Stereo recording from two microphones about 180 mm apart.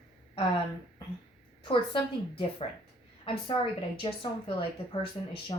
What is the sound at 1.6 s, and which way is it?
A woman's voice, 30° left (ahead or behind).